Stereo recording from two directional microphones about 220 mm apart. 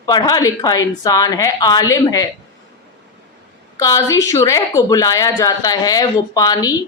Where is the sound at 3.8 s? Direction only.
15° left (ahead or behind).